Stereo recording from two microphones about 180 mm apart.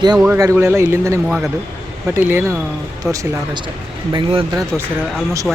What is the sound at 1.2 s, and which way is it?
Speech, centre (ahead or behind).